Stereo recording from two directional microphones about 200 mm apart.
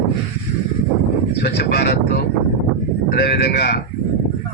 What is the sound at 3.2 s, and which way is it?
Speech, 55° left (ahead or behind).